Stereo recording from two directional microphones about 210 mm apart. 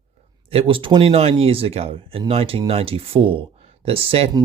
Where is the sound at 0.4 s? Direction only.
25° right (ahead or behind).